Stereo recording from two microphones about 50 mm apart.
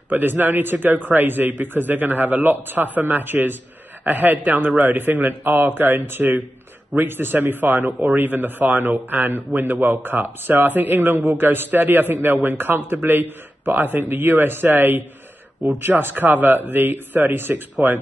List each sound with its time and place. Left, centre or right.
0.1 s a man's voice: right